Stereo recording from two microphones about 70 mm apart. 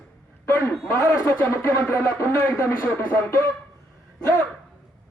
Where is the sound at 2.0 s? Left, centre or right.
Left.